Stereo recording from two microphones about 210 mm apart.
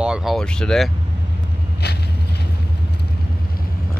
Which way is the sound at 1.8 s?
50° left (ahead or behind).